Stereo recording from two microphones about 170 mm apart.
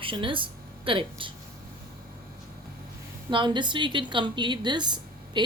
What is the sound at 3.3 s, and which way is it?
A woman's voice, 30° right (ahead or behind).